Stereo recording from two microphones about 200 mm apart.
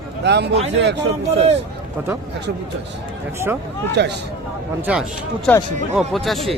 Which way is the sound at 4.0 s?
60° right (ahead or behind).